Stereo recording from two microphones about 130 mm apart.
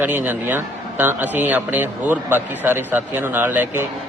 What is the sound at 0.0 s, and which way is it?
A man's voice, 15° right (ahead or behind).